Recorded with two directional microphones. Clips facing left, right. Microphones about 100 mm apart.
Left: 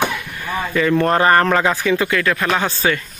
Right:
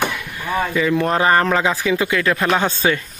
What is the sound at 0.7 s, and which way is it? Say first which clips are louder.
Speech: left 4 dB; 10° right (ahead or behind).